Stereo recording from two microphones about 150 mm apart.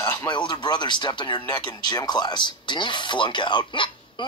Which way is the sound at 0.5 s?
30° left (ahead or behind).